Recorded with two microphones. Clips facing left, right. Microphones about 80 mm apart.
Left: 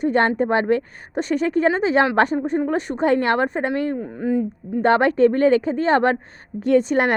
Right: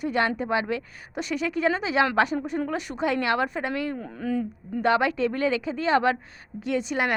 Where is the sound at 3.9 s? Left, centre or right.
Centre.